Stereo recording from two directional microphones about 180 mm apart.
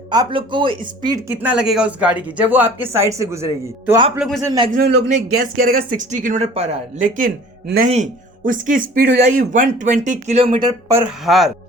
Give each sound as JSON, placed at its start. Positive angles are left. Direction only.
{"t": 0.1, "sound": "speech", "side_deg": -25}
{"t": 1.4, "sound": "speech", "side_deg": -5}
{"t": 4.7, "sound": "a man's voice", "side_deg": -60}
{"t": 5.0, "sound": "speech", "side_deg": -50}
{"t": 7.2, "sound": "a man's voice", "side_deg": -55}
{"t": 10.7, "sound": "speech", "side_deg": -15}
{"t": 11.3, "sound": "speech", "side_deg": 0}